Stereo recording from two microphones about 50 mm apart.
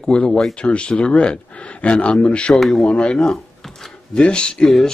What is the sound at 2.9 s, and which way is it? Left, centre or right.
A man's voice, left.